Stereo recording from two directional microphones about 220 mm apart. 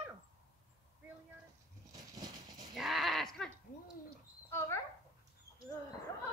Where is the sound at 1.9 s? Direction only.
15° right (ahead or behind).